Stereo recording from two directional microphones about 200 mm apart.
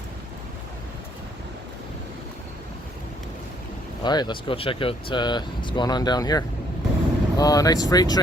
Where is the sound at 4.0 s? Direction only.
20° left (ahead or behind).